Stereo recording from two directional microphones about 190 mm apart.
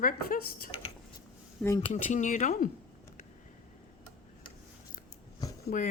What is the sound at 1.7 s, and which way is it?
Speech, 25° left (ahead or behind).